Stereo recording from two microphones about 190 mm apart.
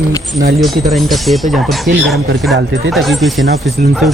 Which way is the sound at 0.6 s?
Centre (ahead or behind).